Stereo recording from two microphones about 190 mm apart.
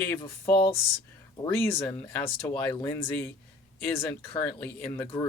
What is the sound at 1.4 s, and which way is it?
Speech, 15° left (ahead or behind).